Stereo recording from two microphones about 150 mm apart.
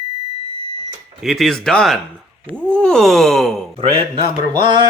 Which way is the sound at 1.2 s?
Centre (ahead or behind).